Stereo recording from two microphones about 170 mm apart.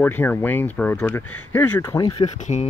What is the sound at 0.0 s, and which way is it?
Speech, 10° left (ahead or behind).